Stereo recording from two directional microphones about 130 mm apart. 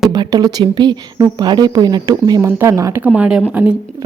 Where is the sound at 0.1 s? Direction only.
30° right (ahead or behind).